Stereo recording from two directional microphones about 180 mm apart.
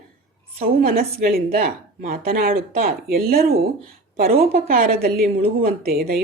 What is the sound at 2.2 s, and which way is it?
Speech, 55° right (ahead or behind).